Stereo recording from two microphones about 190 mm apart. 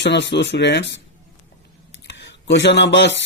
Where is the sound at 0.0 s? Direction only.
70° left (ahead or behind).